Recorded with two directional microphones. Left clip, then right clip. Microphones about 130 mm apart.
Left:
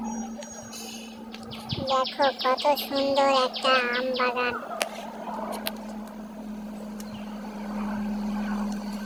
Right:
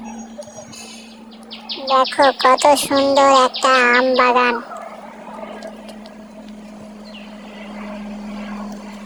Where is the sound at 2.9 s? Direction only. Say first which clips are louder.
Right 9 dB; 55° right (ahead or behind); by 4.6 s 90° right.